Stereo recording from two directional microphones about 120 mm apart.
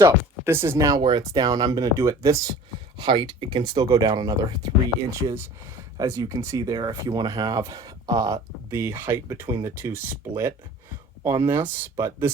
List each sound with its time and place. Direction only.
0.0 s speech: 20° right (ahead or behind)
3.0 s speech: 40° right (ahead or behind)
6.0 s speech: 30° right (ahead or behind)